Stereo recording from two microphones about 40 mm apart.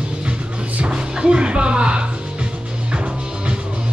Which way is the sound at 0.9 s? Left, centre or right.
Right.